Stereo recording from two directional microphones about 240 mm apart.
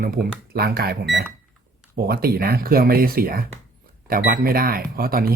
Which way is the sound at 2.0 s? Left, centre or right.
Right.